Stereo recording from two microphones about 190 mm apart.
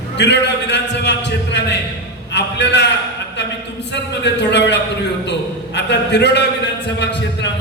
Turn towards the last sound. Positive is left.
turn(degrees=65)  # may be behind; listen again after turning